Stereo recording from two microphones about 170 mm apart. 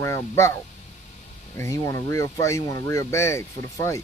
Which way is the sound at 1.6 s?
20° left (ahead or behind).